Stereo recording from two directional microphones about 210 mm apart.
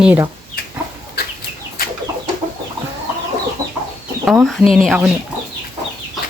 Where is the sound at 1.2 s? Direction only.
45° left (ahead or behind).